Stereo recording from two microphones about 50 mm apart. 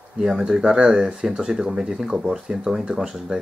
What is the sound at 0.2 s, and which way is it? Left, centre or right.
Speech, centre.